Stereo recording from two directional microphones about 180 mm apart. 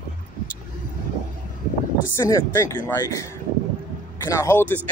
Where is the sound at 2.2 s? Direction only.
20° left (ahead or behind).